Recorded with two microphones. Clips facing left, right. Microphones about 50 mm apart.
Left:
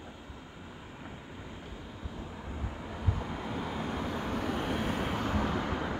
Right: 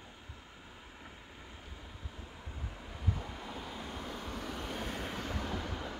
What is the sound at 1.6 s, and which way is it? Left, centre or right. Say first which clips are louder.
Vehicle: left 6 dB; left.